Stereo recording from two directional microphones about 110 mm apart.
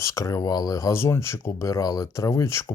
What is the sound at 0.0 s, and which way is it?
Speech, 30° left (ahead or behind).